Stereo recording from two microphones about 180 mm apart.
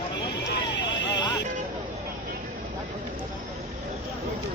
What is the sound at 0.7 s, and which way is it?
Vehicle, 80° left.